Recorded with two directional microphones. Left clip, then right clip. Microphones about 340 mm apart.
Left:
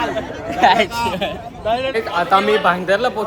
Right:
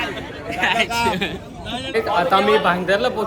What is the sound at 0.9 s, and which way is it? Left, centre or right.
Speech, centre.